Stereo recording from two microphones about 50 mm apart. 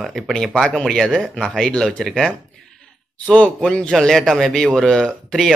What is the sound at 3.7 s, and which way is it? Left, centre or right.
Speech, centre.